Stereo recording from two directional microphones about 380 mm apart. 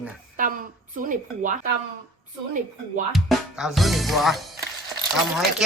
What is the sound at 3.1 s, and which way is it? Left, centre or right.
Speech, centre.